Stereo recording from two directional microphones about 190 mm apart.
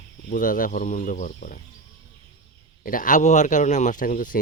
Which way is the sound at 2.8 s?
45° left (ahead or behind).